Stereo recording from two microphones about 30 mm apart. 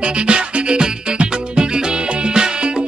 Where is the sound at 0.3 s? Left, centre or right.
Right.